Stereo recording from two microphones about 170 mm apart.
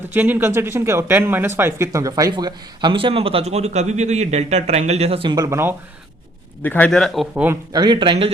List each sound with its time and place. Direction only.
0.1 s speech: 10° right (ahead or behind)
6.6 s speech: 10° left (ahead or behind)
7.4 s speech: 20° right (ahead or behind)